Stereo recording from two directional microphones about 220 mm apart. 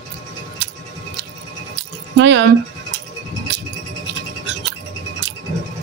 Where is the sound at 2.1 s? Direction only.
55° right (ahead or behind).